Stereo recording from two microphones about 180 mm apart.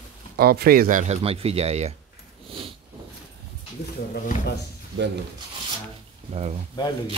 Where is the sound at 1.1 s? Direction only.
35° right (ahead or behind).